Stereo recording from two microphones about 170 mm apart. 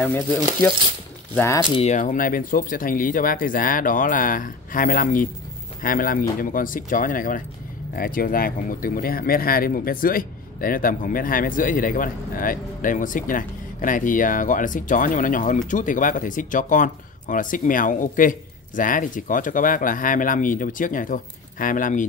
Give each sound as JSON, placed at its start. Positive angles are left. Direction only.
{"t": 0.0, "sound": "speech", "side_deg": 10}
{"t": 1.8, "sound": "a man's voice", "side_deg": 45}